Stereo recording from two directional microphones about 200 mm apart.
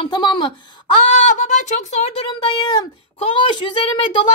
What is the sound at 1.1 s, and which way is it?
Speech, 35° left (ahead or behind).